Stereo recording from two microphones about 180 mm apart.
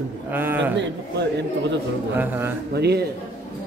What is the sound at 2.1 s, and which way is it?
Speech, 10° right (ahead or behind).